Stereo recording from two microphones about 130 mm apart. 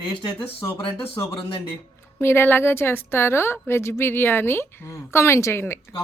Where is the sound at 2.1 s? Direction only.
20° left (ahead or behind).